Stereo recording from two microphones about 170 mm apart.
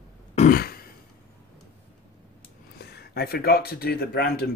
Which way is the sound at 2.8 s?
70° left (ahead or behind).